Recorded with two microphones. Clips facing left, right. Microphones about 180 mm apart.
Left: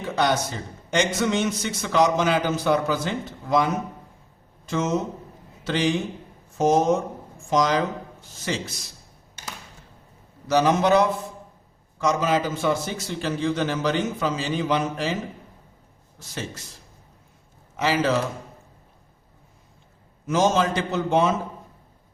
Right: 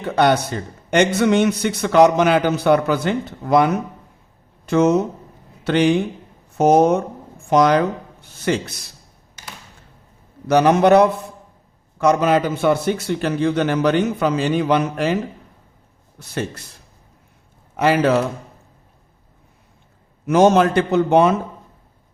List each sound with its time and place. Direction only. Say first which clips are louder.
0.0 s a man's voice: right 6 dB; 60° right (ahead or behind)
10.5 s a man's voice: right 6 dB; 65° right (ahead or behind)
17.7 s a man's voice: right 6 dB; 60° right (ahead or behind)
20.2 s a man's voice: right 7 dB; 60° right (ahead or behind)